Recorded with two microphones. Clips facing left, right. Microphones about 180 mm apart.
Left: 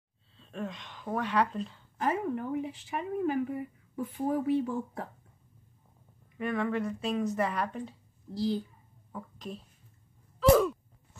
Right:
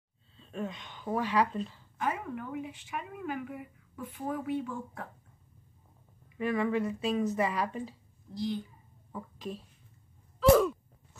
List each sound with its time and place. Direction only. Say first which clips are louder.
0.4 s speech: right 1 dB; centre (ahead or behind)
2.0 s speech: left 4 dB; 35° left (ahead or behind)
6.3 s speech: right 1 dB; centre (ahead or behind)
8.4 s speech: left 3 dB; 35° left (ahead or behind)
9.1 s speech: right 1 dB; centre (ahead or behind)
10.4 s a sound: even; centre (ahead or behind)